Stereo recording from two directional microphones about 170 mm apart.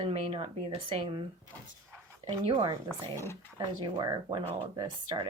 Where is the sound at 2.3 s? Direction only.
25° right (ahead or behind).